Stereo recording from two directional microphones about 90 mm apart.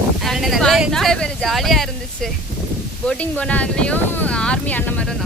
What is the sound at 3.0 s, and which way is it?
Speech, 15° left (ahead or behind).